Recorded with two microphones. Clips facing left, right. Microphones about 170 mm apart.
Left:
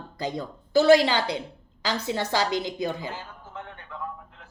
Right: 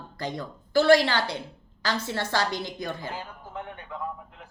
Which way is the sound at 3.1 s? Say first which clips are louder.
Right 1 dB; 15° right (ahead or behind).